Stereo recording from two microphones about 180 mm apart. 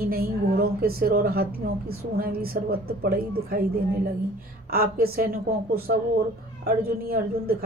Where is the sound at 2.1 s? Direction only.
55° right (ahead or behind).